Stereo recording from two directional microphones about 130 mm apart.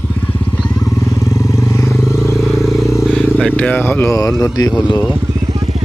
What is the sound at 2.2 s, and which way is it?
Vehicle, centre (ahead or behind).